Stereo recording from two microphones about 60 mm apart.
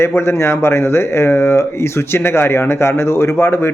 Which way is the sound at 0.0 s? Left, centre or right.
Left.